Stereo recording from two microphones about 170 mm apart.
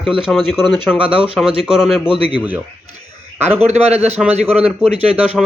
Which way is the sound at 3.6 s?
40° right (ahead or behind).